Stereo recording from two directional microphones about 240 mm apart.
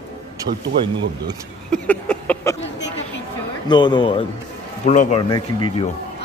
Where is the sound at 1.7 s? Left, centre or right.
Centre.